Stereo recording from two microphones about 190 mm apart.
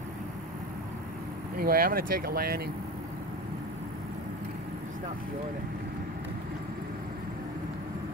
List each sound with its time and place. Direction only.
1.6 s speech: 50° right (ahead or behind)